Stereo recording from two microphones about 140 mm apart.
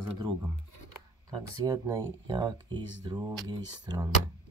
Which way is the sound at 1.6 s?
20° right (ahead or behind).